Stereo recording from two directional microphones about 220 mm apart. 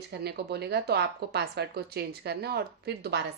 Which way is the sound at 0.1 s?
50° right (ahead or behind).